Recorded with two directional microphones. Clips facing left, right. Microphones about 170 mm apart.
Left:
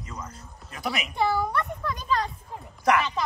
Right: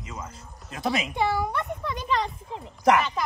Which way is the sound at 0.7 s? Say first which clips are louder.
Right 4 dB; 25° right (ahead or behind).